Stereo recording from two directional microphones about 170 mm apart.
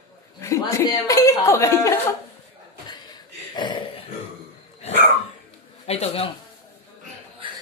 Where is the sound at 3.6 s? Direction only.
30° left (ahead or behind).